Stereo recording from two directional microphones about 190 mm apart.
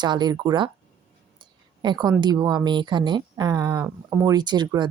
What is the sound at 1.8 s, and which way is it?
Speech, 20° right (ahead or behind).